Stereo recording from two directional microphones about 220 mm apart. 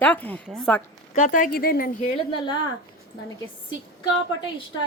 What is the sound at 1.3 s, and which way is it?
Speech, 40° left (ahead or behind).